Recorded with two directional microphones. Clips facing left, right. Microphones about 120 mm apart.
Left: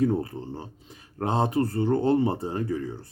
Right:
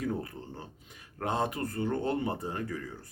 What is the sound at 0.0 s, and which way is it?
Speech, 30° left (ahead or behind).